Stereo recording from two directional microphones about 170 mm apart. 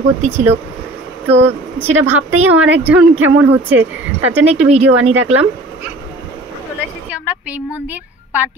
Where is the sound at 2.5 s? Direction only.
10° right (ahead or behind).